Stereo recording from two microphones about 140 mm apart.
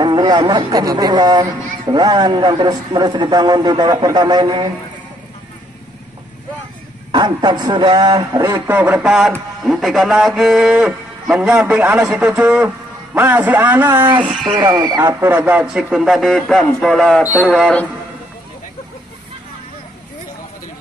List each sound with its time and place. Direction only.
0.0 s speech: 30° right (ahead or behind)
7.1 s a man's voice: 30° right (ahead or behind); by 14.3 s 15° right (ahead or behind)
14.6 s speech: 30° right (ahead or behind)
15.1 s speech: 15° right (ahead or behind); by 17.8 s 5° left (ahead or behind)